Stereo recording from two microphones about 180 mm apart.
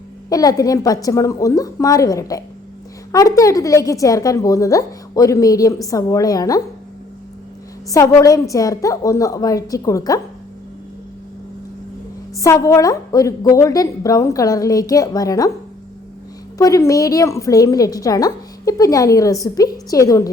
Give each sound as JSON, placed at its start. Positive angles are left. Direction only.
{"t": 0.3, "sound": "a woman's voice", "side_deg": 20}
{"t": 7.9, "sound": "a woman's voice", "side_deg": 20}
{"t": 12.4, "sound": "a woman's voice", "side_deg": 15}
{"t": 16.6, "sound": "a woman's voice", "side_deg": 20}